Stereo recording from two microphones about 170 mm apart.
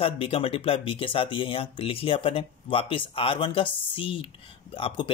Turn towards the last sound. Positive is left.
turn(degrees=30)  # may be behind; listen again after turning